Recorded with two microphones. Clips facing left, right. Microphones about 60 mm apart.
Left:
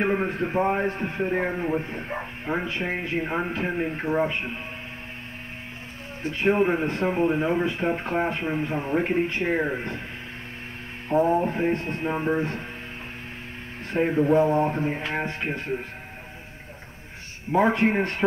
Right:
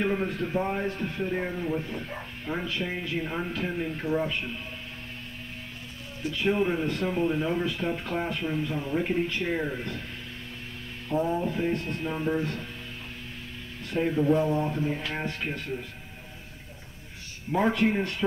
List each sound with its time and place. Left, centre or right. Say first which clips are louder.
0.0 s a man's voice: left 3 dB; left
6.2 s a man's voice: left 4 dB; left
11.1 s a man's voice: left 6 dB; left
13.8 s a man's voice: left 3 dB; left
17.5 s a man's voice: left 4 dB; left